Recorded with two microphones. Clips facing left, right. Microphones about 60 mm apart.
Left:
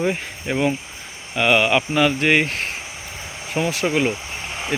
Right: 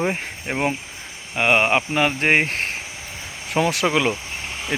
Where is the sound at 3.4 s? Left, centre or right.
Right.